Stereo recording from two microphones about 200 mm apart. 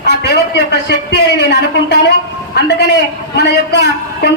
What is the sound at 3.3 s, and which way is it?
Speech, 55° left (ahead or behind).